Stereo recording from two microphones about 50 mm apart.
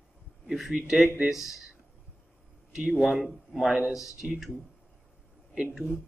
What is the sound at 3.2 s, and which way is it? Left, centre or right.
Speech, centre.